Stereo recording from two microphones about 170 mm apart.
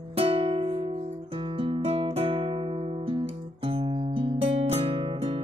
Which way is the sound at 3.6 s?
35° right (ahead or behind).